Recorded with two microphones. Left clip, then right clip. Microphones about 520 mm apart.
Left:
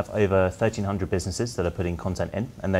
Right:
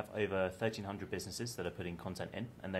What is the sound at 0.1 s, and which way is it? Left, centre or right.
Speech, left.